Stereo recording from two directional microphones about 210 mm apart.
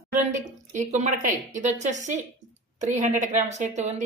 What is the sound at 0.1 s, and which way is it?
Speech, 35° right (ahead or behind).